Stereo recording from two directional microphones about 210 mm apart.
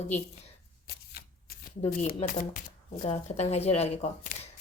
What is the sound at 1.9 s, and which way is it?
Speech, 40° left (ahead or behind).